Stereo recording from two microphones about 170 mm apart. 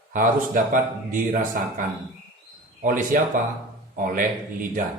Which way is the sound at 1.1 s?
50° right (ahead or behind).